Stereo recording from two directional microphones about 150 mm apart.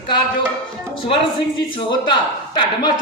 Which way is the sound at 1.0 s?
35° left (ahead or behind).